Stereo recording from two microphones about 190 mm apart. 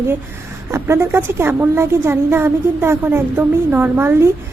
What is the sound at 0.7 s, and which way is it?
A woman's voice, 15° right (ahead or behind).